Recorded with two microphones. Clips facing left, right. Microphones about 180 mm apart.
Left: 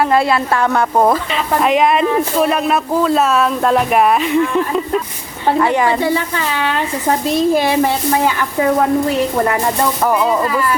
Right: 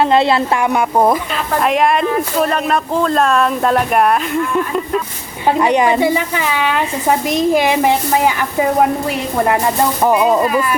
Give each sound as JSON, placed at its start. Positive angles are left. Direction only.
{"t": 0.0, "sound": "speech", "side_deg": -25}
{"t": 0.6, "sound": "speech", "side_deg": -15}
{"t": 5.5, "sound": "a woman's voice", "side_deg": -15}
{"t": 10.0, "sound": "speech", "side_deg": -20}